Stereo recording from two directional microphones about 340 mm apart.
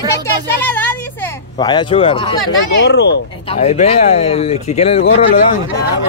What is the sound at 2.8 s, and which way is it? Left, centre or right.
Speech, left.